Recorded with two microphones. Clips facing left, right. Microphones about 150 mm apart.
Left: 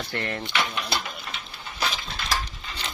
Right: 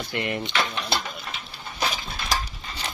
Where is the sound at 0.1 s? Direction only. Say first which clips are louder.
Right 4 dB; 15° right (ahead or behind).